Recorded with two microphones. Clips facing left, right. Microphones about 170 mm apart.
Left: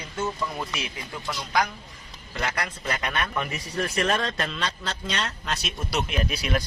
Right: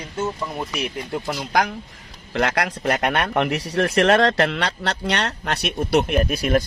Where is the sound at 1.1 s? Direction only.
55° right (ahead or behind).